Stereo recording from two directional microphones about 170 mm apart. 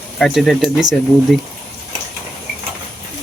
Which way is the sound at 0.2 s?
Centre (ahead or behind).